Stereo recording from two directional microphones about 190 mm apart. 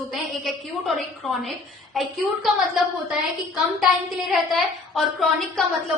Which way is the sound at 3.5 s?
Centre (ahead or behind).